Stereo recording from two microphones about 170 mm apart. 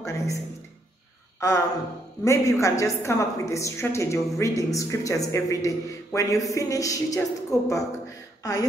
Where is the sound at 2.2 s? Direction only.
15° left (ahead or behind).